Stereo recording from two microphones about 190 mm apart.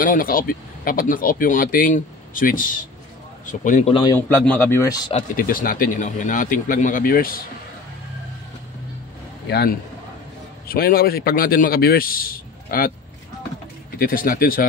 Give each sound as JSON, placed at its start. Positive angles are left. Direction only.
{"t": 0.0, "sound": "speech", "side_deg": 45}
{"t": 3.9, "sound": "a man's voice", "side_deg": 20}
{"t": 4.5, "sound": "speech", "side_deg": 10}
{"t": 5.1, "sound": "speech", "side_deg": 45}
{"t": 9.5, "sound": "a man's voice", "side_deg": 60}
{"t": 13.9, "sound": "speech", "side_deg": 50}